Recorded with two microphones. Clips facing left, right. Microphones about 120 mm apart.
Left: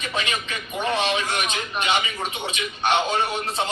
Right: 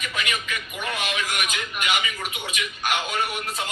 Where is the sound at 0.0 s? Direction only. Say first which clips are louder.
Left 2 dB; 30° left (ahead or behind).